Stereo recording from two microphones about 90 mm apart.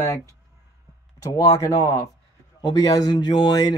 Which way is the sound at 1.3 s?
40° left (ahead or behind).